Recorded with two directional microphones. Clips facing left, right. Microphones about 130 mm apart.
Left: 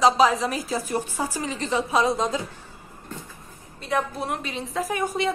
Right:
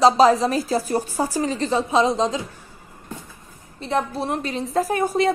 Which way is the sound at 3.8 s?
30° right (ahead or behind).